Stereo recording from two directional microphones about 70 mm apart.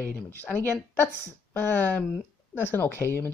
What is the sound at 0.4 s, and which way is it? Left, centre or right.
Speech, left.